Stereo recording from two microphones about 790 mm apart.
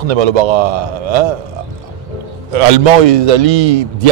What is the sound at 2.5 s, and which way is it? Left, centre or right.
A man's voice, right.